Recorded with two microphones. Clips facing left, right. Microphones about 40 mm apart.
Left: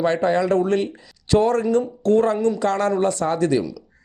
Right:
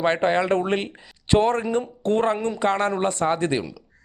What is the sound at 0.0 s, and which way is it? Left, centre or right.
A man's voice, right.